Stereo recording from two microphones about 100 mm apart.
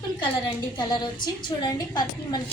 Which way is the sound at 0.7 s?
45° left (ahead or behind).